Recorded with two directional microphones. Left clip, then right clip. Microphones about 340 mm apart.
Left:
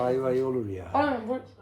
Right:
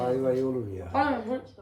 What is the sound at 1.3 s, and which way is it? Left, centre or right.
Speech, centre.